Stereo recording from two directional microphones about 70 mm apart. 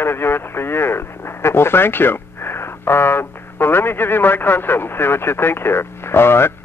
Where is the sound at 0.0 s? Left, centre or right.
Left.